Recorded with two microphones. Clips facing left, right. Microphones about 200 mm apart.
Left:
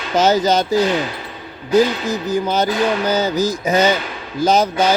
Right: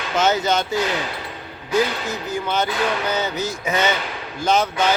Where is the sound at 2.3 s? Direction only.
40° left (ahead or behind).